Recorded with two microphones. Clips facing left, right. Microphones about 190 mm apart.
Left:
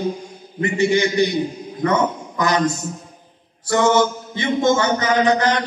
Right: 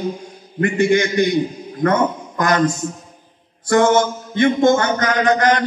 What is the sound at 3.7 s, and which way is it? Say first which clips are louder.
A man's voice: right 2 dB; 55° right (ahead or behind).